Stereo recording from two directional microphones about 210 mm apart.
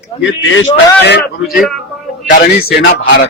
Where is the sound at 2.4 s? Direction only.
45° left (ahead or behind).